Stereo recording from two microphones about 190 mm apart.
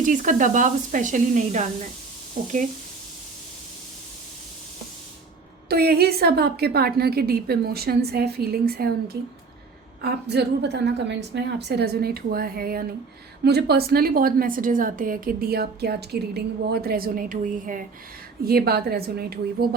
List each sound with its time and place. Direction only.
0.0 s a woman's voice: 40° right (ahead or behind)
5.6 s a woman's voice: 55° right (ahead or behind)
18.4 s a woman's voice: 55° right (ahead or behind)